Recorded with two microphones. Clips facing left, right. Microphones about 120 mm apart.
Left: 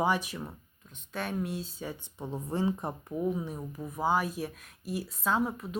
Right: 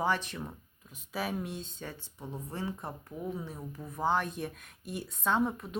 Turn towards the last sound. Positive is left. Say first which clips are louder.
# even
turn(degrees=0)  # may be behind; listen again after turning